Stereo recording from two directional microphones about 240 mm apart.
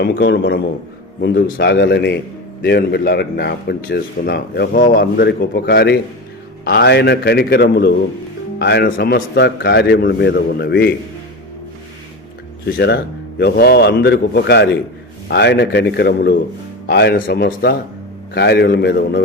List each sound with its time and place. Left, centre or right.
0.0 s a man's voice: left
12.7 s a man's voice: left